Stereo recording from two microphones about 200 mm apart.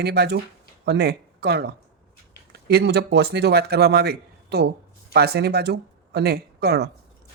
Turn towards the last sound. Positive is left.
turn(degrees=-55)  # may be behind; listen again after turning